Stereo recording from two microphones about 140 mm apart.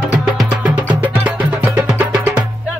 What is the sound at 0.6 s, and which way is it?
Music, 10° right (ahead or behind).